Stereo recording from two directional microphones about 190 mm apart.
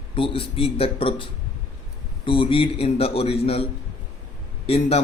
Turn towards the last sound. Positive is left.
turn(degrees=30)  # may be behind; listen again after turning